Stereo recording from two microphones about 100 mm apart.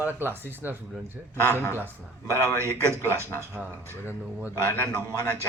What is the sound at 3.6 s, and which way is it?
Speech, 15° left (ahead or behind).